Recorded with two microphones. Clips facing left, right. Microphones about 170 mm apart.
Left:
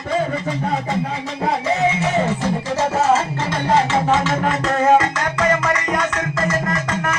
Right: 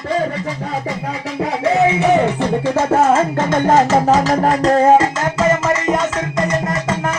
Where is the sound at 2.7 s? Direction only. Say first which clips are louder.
Right 4 dB; 55° right (ahead or behind); by 6.9 s 20° right (ahead or behind).